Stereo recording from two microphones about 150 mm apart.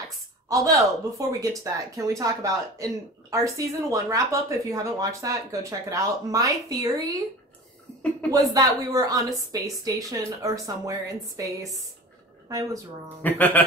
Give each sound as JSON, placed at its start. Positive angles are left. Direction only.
{"t": 0.5, "sound": "speech", "side_deg": -20}
{"t": 8.3, "sound": "speech", "side_deg": -25}
{"t": 13.2, "sound": "speech", "side_deg": 10}